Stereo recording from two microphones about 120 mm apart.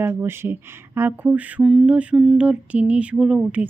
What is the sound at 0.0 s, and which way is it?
A woman's voice, 20° right (ahead or behind).